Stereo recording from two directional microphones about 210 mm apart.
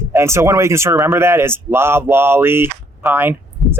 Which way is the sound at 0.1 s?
15° right (ahead or behind).